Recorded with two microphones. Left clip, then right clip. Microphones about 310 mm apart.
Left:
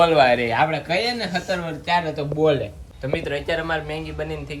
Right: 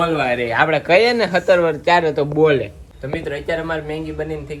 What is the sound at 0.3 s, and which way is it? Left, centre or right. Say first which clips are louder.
Speech: left 1 dB; left.